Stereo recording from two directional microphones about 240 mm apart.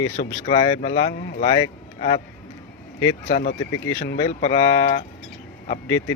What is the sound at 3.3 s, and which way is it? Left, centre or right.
Speech, left.